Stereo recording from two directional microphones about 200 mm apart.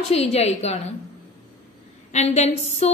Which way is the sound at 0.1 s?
30° left (ahead or behind).